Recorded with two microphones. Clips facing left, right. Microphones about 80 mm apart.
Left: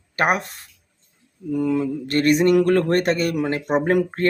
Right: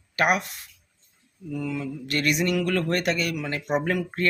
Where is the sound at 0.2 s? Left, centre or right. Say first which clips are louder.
Left 2 dB; left.